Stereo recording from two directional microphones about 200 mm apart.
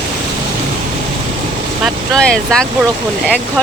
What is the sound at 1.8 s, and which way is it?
Speech, 5° left (ahead or behind).